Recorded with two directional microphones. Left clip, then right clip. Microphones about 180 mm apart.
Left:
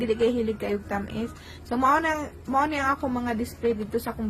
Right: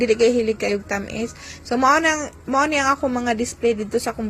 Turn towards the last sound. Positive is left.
turn(degrees=-20)  # may be behind; listen again after turning